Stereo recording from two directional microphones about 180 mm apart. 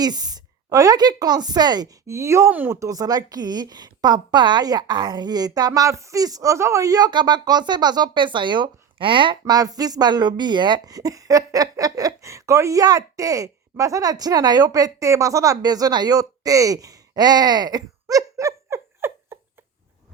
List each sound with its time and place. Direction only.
0.0 s a woman's voice: 20° right (ahead or behind)